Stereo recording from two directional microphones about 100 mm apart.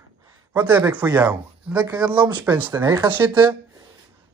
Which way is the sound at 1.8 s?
45° right (ahead or behind).